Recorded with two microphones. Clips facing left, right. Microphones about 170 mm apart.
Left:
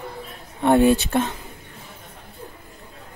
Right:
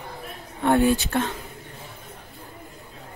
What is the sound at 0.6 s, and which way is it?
Speech, 20° left (ahead or behind).